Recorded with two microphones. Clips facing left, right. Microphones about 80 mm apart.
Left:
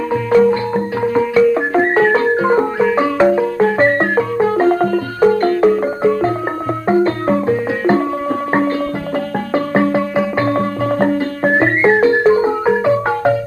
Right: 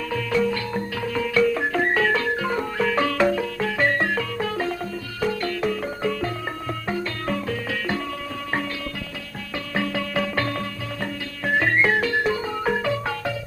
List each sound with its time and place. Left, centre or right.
0.3 s music: left
2.8 s music: left
9.5 s music: left